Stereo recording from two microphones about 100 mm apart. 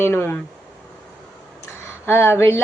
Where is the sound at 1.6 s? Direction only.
25° left (ahead or behind).